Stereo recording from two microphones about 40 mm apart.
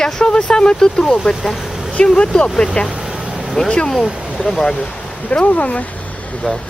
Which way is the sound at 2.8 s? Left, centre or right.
Left.